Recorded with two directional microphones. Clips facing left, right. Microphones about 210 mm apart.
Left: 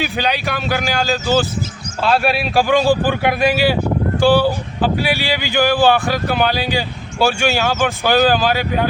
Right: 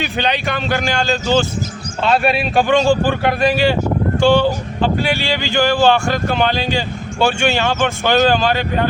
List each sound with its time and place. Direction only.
0.0 s speech: 5° left (ahead or behind)